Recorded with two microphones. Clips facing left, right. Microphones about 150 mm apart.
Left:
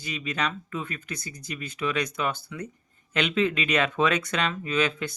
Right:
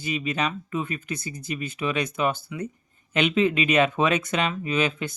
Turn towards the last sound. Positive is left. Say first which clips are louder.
# right 1 dB
turn(degrees=-20)  # may be behind; listen again after turning